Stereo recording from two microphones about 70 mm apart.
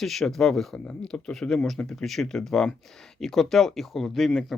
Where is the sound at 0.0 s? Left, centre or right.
Centre.